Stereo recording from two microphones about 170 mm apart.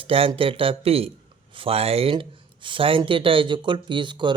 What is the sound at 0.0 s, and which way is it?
Speech, 30° right (ahead or behind).